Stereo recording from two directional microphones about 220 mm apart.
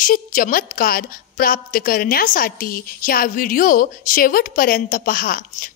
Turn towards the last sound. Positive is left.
turn(degrees=40)  # may be behind; listen again after turning